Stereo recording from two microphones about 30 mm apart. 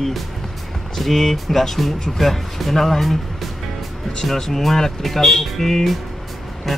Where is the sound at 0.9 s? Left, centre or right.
Centre.